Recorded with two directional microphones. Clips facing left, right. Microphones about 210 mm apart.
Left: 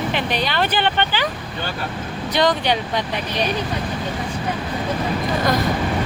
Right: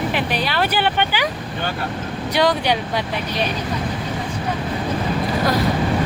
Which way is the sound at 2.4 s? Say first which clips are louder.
Even; 10° right (ahead or behind).